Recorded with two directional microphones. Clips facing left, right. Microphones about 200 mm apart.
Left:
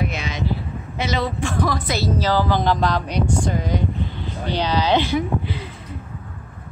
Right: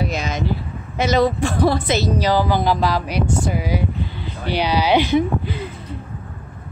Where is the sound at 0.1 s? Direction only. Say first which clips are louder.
Right 4 dB; 40° right (ahead or behind).